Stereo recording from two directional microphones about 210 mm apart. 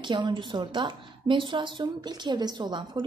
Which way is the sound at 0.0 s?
20° right (ahead or behind).